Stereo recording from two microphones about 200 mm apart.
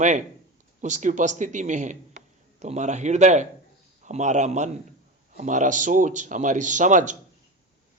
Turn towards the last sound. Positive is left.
turn(degrees=-40)  # may be behind; listen again after turning